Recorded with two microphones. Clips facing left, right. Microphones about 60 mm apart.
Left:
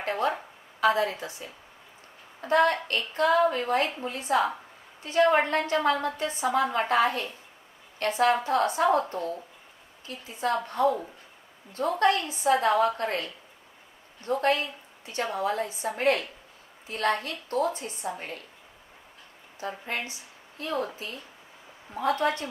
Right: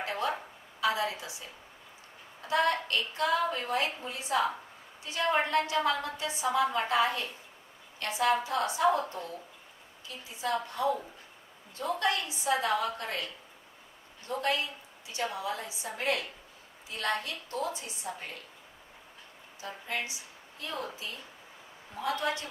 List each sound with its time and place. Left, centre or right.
0.1 s a sound: left
0.8 s a woman's voice: left
19.5 s a woman's voice: left